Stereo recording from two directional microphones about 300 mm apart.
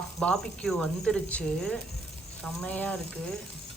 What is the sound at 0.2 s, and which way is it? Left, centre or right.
Speech, centre.